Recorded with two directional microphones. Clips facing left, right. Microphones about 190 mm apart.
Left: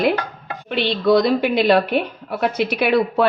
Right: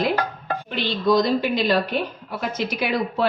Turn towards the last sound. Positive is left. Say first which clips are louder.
# left 6 dB
turn(degrees=65)  # may be behind; listen again after turning